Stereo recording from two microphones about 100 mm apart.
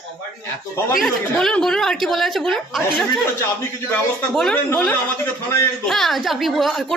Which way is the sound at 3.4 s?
20° left (ahead or behind).